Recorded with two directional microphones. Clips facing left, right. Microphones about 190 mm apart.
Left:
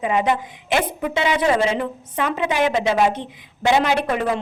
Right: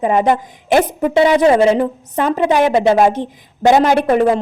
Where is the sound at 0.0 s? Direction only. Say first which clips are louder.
Right 6 dB; 40° right (ahead or behind).